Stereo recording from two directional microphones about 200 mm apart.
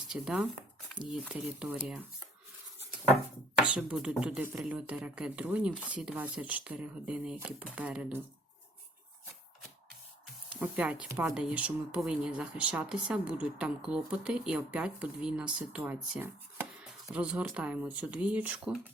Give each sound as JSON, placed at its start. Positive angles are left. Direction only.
{"t": 0.1, "sound": "speech", "side_deg": -5}
{"t": 3.8, "sound": "speech", "side_deg": -5}
{"t": 10.6, "sound": "speech", "side_deg": -5}